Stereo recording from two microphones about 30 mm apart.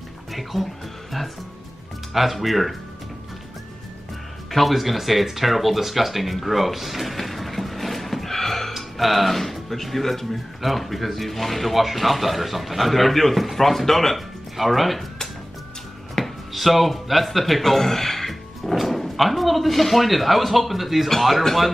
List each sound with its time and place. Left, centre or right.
0.3 s speech: centre
2.3 s speech: centre
4.5 s speech: centre
16.2 s a sound: left
16.5 s a man's voice: centre